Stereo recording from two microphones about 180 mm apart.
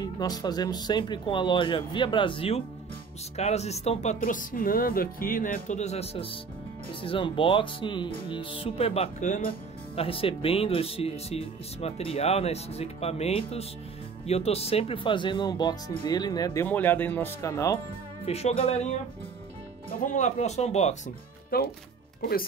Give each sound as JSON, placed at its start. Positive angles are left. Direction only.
{"t": 0.0, "sound": "speech", "side_deg": 20}
{"t": 9.9, "sound": "speech", "side_deg": 30}
{"t": 16.6, "sound": "speech", "side_deg": 10}
{"t": 17.7, "sound": "speech", "side_deg": 35}
{"t": 19.9, "sound": "speech", "side_deg": 45}
{"t": 21.5, "sound": "speech", "side_deg": 60}